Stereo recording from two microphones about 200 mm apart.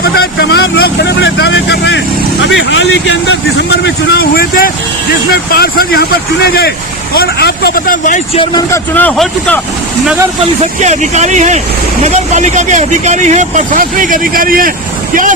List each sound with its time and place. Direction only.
0.0 s a man's voice: 55° left (ahead or behind)
8.4 s speech: 20° left (ahead or behind)
9.0 s speech: 5° left (ahead or behind)
10.8 s speech: 35° right (ahead or behind)